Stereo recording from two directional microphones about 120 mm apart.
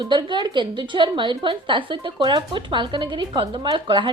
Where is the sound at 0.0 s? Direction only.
40° right (ahead or behind).